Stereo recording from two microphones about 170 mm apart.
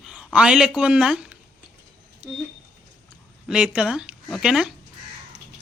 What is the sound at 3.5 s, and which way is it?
Speech, 5° right (ahead or behind).